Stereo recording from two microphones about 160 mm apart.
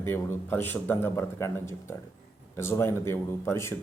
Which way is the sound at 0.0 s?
15° left (ahead or behind).